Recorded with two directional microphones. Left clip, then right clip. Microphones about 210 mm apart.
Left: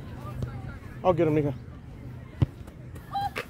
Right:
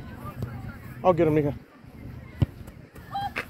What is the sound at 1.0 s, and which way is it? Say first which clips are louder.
Speech: right 2 dB; 15° right (ahead or behind).